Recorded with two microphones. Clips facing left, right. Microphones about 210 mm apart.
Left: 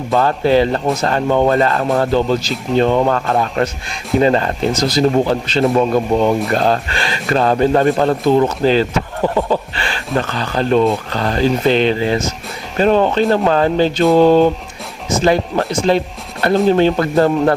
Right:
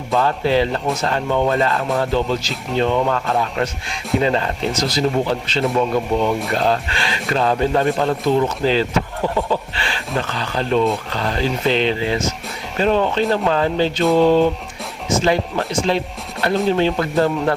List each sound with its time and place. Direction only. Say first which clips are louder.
0.2 s a man's voice: left 4 dB; 45° left (ahead or behind)